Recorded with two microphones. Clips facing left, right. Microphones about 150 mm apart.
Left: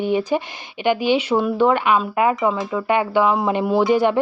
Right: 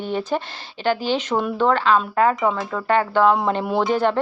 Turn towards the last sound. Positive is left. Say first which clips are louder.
# left 3 dB
turn(degrees=10)  # may be behind; listen again after turning